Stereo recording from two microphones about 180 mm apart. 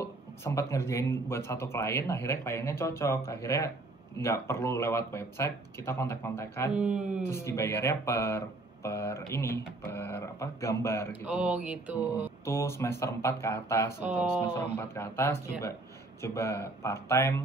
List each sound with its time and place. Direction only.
0.0 s speech: 15° left (ahead or behind)
6.7 s mantra: 5° right (ahead or behind)
7.2 s speech: 15° left (ahead or behind)
11.2 s mantra: 5° right (ahead or behind)
12.4 s speech: 15° left (ahead or behind)